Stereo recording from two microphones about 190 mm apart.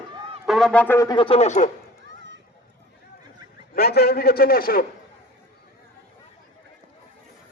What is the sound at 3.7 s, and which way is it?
A man's voice, 55° left (ahead or behind).